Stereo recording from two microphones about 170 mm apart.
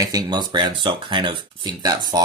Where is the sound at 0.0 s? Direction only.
20° right (ahead or behind).